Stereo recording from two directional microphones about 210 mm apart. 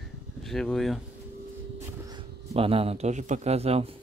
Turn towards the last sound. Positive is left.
turn(degrees=-30)  # may be behind; listen again after turning